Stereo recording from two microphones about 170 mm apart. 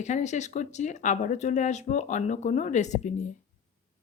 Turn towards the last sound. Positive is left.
turn(degrees=45)  # may be behind; listen again after turning